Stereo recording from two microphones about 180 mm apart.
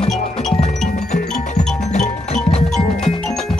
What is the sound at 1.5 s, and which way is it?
Music, 40° left (ahead or behind).